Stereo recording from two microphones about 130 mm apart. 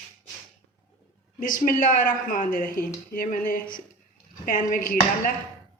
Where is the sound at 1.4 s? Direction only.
90° left.